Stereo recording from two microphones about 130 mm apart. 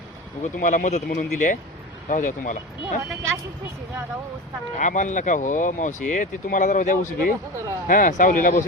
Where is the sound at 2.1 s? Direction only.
90° left.